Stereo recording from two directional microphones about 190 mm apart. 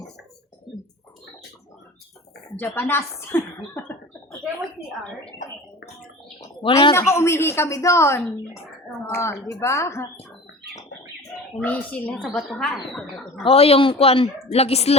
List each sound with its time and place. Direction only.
2.6 s speech: 10° left (ahead or behind)
6.6 s speech: 30° left (ahead or behind)
7.1 s speech: 15° left (ahead or behind)
11.6 s speech: 10° left (ahead or behind)
13.4 s a woman's voice: 30° left (ahead or behind)